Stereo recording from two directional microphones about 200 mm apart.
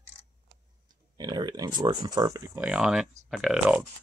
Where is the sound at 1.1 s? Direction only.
20° right (ahead or behind); by 3.8 s 5° right (ahead or behind).